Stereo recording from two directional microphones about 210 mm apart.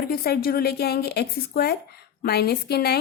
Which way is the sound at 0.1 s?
45° left (ahead or behind).